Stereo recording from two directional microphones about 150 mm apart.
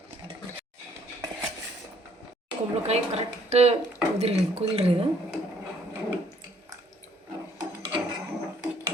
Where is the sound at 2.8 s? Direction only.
45° right (ahead or behind).